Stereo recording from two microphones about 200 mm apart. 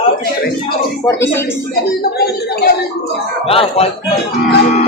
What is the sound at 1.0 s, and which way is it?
Speech, 10° left (ahead or behind).